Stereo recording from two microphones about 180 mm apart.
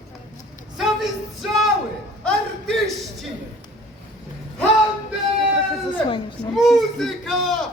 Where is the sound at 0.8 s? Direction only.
Centre (ahead or behind).